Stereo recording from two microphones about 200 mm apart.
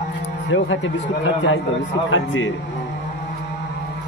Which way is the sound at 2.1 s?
75° left (ahead or behind).